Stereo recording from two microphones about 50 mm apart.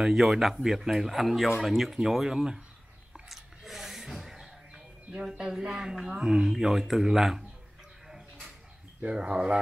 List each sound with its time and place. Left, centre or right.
0.0 s speech: centre
3.1 s a sound: centre
5.4 s speech: centre
9.0 s speech: right